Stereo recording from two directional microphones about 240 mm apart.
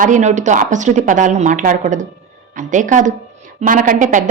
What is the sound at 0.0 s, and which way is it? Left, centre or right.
A woman's voice, right.